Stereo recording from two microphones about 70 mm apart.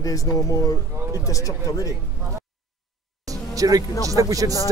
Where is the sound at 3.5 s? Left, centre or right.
Right.